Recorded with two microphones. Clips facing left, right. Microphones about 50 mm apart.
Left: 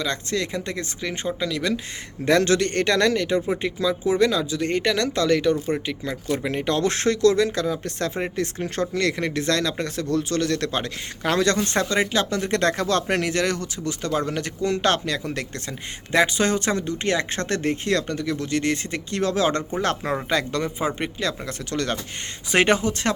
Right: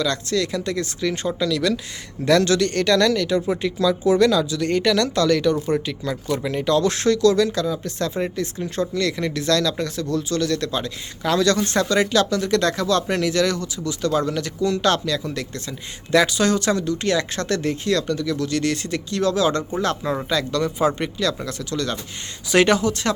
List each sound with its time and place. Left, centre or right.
0.0 s speech: left
6.2 s speech: left
16.1 s speech: left
21.7 s speech: left
22.5 s speech: left